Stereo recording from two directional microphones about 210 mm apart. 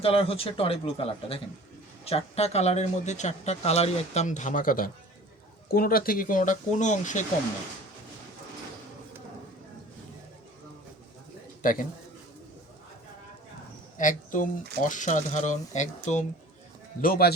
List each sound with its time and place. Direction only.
0.0 s speech: 25° left (ahead or behind)
11.6 s a man's voice: 40° left (ahead or behind)
14.0 s speech: 40° left (ahead or behind)
17.0 s speech: 45° left (ahead or behind)